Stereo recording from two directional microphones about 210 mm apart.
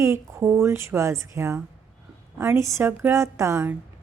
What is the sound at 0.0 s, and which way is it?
A woman's voice, 15° right (ahead or behind).